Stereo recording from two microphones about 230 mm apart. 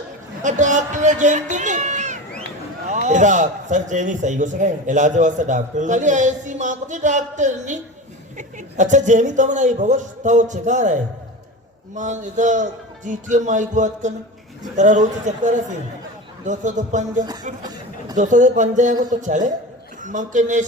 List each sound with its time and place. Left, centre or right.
0.4 s a man's voice: right
17.6 s a sound: centre
18.2 s a man's voice: right